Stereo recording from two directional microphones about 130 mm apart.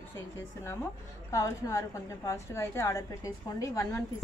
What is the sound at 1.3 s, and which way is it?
A woman's voice, 25° left (ahead or behind).